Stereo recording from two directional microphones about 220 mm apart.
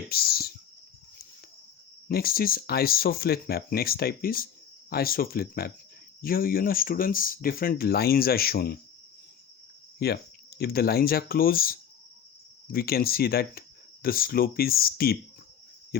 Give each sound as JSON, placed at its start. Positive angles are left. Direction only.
{"t": 0.1, "sound": "a sound", "side_deg": 45}
{"t": 2.0, "sound": "speech", "side_deg": 45}
{"t": 10.0, "sound": "speech", "side_deg": 45}